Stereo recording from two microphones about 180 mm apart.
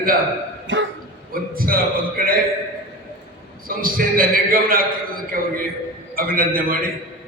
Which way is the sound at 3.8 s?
50° right (ahead or behind).